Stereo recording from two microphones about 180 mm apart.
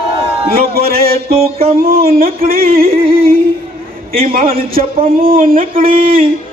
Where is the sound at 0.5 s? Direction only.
55° right (ahead or behind).